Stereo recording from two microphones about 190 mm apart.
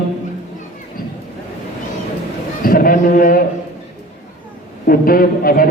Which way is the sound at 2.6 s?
50° left (ahead or behind).